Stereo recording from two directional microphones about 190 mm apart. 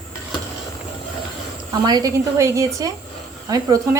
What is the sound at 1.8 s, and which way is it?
A woman's voice, 20° right (ahead or behind).